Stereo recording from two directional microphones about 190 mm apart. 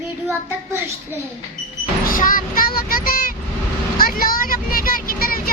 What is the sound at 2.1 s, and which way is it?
Speech, 45° left (ahead or behind).